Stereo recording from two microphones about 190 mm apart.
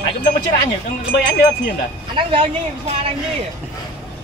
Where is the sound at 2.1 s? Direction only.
25° right (ahead or behind).